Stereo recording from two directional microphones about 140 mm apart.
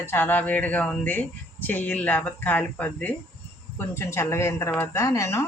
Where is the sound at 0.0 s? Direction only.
15° left (ahead or behind).